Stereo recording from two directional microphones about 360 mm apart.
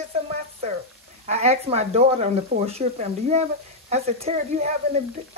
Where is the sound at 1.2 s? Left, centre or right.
Centre.